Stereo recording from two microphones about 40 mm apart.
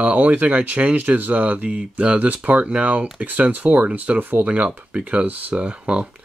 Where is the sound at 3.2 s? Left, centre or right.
Right.